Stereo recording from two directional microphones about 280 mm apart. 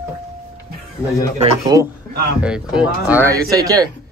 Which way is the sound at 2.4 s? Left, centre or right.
Centre.